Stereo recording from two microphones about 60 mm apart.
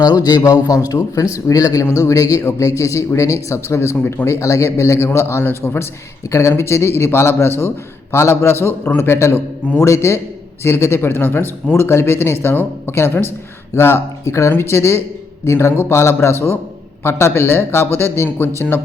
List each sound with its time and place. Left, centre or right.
0.0 s a man's voice: left
1.8 s speech: left
2.6 s a man's voice: left
3.9 s speech: left
4.3 s a man's voice: left
14.5 s speech: left